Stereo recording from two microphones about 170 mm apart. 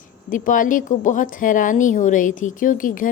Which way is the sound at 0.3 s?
50° left (ahead or behind).